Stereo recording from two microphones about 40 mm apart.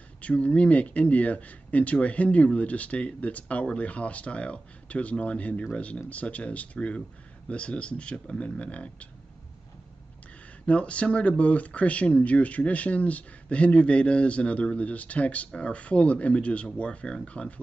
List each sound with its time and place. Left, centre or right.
0.2 s speech: left
10.7 s speech: left